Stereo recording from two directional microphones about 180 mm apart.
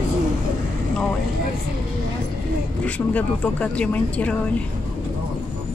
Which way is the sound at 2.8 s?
10° left (ahead or behind).